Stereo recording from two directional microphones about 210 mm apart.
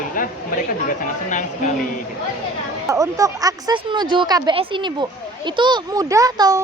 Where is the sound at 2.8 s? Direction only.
15° right (ahead or behind).